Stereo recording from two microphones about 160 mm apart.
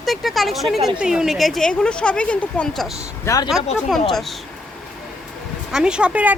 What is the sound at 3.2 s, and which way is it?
Speech, 20° left (ahead or behind).